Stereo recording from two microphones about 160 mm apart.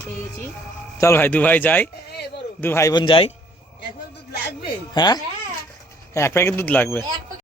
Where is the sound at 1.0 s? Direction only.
15° left (ahead or behind); by 3.3 s 30° left (ahead or behind).